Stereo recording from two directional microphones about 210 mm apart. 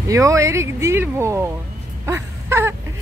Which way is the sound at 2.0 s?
10° right (ahead or behind).